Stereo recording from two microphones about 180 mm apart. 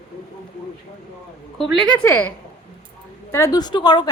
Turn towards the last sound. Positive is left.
turn(degrees=25)  # may be behind; listen again after turning